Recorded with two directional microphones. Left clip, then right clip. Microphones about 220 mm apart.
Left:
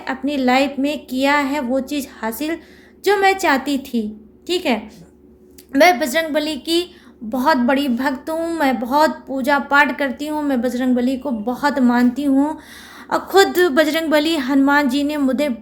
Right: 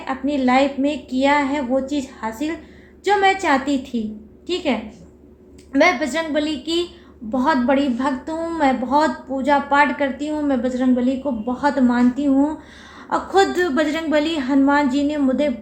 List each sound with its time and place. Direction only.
0.0 s a woman's voice: 50° left (ahead or behind)